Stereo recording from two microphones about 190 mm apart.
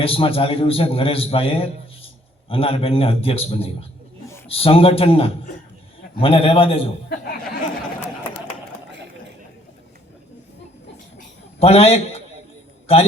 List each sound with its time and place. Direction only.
0.0 s a man's voice: 30° left (ahead or behind)
11.6 s a man's voice: 30° left (ahead or behind)